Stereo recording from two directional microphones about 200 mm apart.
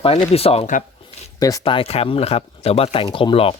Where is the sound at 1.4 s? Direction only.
15° left (ahead or behind).